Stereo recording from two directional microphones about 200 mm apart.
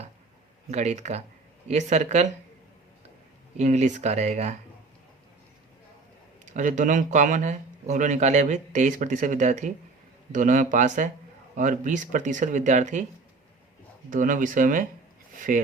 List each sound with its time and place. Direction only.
0.7 s speech: 35° right (ahead or behind)
3.6 s speech: 35° right (ahead or behind)
6.4 s speech: 40° right (ahead or behind)
14.1 s speech: 40° right (ahead or behind)